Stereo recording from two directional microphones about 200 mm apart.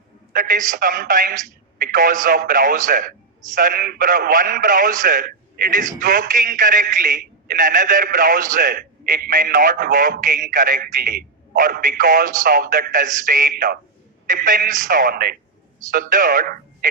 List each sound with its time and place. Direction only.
0.3 s a man's voice: 40° right (ahead or behind)